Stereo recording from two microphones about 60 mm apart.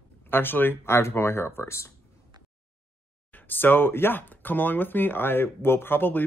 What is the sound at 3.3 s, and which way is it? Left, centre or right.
Speech, left.